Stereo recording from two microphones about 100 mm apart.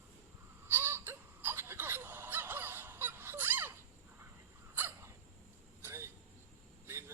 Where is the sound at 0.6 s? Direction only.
20° right (ahead or behind).